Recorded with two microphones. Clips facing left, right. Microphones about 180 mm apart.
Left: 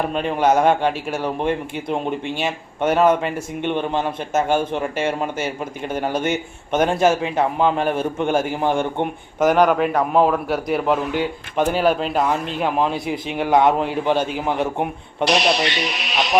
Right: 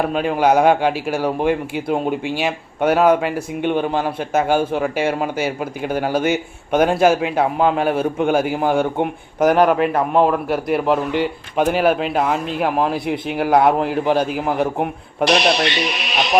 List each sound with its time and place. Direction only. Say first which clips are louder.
0.0 s a man's voice: right 2 dB; 5° right (ahead or behind)
15.4 s speech: right 2 dB; 65° right (ahead or behind)